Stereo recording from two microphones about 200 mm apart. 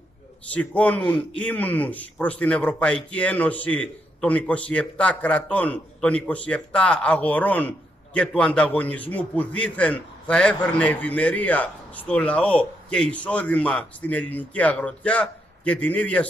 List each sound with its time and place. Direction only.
0.5 s speech: 5° left (ahead or behind)